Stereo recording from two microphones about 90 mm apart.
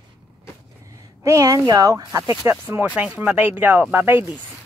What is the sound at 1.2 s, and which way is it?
Speech, 35° right (ahead or behind).